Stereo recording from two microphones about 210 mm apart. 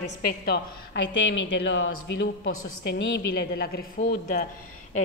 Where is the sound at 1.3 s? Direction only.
60° left (ahead or behind).